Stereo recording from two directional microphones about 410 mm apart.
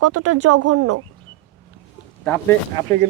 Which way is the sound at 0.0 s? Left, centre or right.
Right.